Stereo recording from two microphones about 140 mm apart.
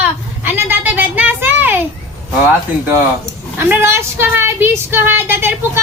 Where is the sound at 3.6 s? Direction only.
15° right (ahead or behind).